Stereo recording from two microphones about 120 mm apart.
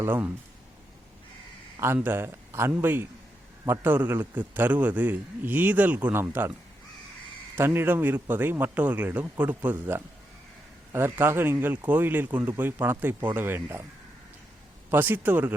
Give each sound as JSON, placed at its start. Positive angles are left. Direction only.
{"t": 0.0, "sound": "a man's voice", "side_deg": -15}
{"t": 2.0, "sound": "a man's voice", "side_deg": -20}
{"t": 7.5, "sound": "a man's voice", "side_deg": -20}
{"t": 14.8, "sound": "a man's voice", "side_deg": -15}